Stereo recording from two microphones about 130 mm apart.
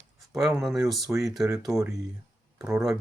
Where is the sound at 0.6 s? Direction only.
5° right (ahead or behind).